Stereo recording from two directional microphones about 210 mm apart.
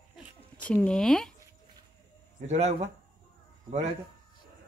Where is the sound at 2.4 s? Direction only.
30° right (ahead or behind).